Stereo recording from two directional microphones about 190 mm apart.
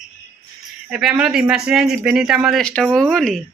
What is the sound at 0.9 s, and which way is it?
Speech, 5° right (ahead or behind).